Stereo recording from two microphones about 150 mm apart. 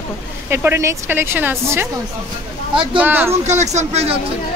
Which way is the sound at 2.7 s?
35° right (ahead or behind).